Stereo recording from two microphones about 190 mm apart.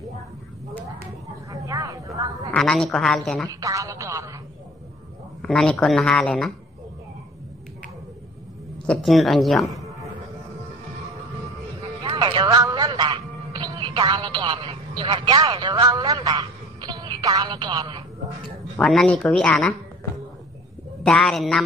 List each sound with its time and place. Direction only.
1.5 s speech: 20° right (ahead or behind)
2.5 s speech: centre (ahead or behind)
3.4 s a woman's voice: 15° right (ahead or behind)
5.4 s speech: 5° left (ahead or behind)
8.8 s speech: centre (ahead or behind)
12.0 s speech: 25° right (ahead or behind)
18.8 s speech: 5° left (ahead or behind)
21.0 s speech: 5° left (ahead or behind)